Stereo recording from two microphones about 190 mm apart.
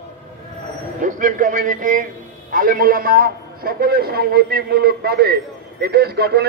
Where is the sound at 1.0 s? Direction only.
40° right (ahead or behind).